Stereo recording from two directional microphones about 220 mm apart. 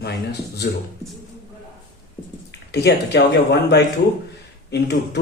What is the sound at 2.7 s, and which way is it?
Speech, 50° left (ahead or behind).